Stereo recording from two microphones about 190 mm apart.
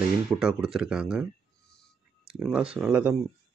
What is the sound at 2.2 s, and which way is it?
Speech, centre (ahead or behind).